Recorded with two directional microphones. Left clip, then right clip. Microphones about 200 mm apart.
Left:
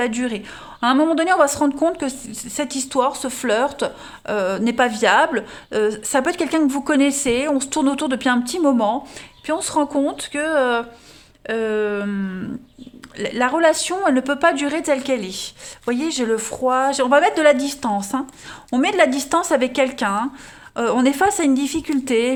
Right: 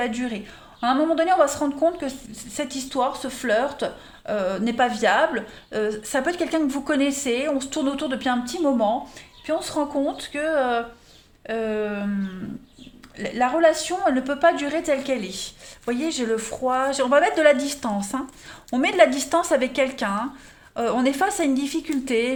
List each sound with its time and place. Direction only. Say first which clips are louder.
0.0 s a woman's voice: left 4 dB; 40° left (ahead or behind)
13.1 s a woman's voice: left 3 dB; 40° left (ahead or behind)